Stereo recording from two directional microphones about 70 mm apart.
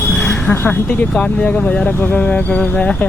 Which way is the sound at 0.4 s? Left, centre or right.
Left.